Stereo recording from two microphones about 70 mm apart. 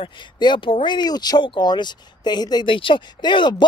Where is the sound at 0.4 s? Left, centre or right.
Left.